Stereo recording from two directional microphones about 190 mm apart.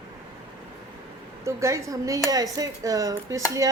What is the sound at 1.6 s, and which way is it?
A woman's voice, 15° right (ahead or behind).